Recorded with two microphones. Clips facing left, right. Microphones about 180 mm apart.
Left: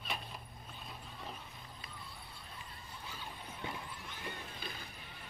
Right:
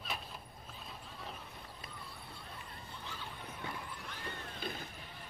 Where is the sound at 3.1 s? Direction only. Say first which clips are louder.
Right 1 dB; 15° left (ahead or behind).